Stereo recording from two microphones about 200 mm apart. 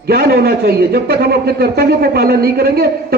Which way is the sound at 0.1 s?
50° right (ahead or behind).